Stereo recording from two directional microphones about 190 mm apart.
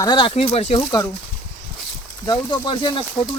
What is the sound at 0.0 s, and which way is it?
Speech, 25° left (ahead or behind).